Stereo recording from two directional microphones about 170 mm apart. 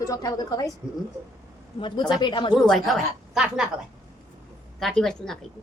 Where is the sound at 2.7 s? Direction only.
Centre (ahead or behind).